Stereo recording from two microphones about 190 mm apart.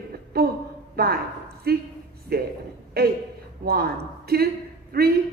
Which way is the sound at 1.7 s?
55° right (ahead or behind).